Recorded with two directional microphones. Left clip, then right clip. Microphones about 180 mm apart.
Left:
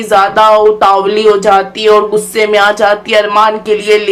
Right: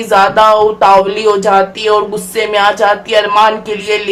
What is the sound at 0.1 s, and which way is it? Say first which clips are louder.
Speech: left 1 dB; 15° left (ahead or behind).